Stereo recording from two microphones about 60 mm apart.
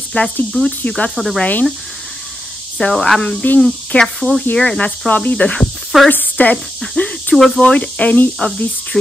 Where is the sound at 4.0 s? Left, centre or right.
Centre.